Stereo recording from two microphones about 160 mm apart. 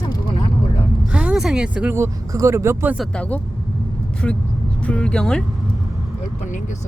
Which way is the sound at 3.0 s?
5° left (ahead or behind).